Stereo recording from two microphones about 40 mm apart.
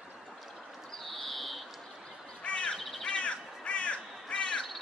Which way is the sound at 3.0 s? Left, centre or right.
Left.